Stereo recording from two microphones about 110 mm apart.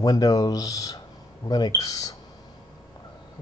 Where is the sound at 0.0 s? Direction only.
35° left (ahead or behind).